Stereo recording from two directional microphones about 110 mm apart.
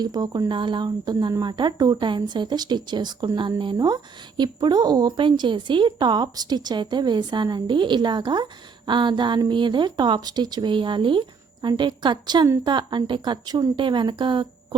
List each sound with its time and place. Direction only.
0.0 s speech: 35° right (ahead or behind)